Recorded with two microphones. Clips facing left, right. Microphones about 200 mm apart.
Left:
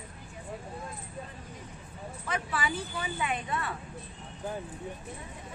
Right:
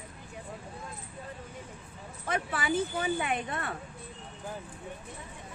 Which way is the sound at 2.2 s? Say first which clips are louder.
Right 1 dB; 50° right (ahead or behind).